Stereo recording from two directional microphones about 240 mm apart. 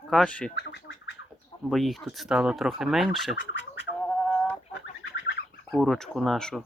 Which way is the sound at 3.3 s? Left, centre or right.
Left.